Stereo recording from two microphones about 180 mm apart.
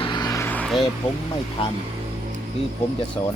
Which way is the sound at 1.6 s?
30° left (ahead or behind).